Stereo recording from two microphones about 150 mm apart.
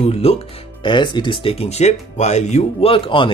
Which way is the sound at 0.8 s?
30° left (ahead or behind).